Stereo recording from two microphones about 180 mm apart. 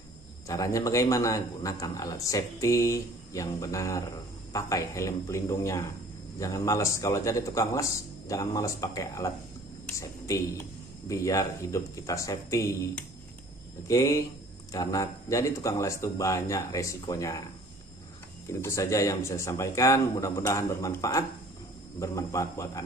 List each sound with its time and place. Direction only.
0.5 s a man's voice: 15° left (ahead or behind)
13.8 s a man's voice: 15° left (ahead or behind)
18.5 s a man's voice: 15° left (ahead or behind)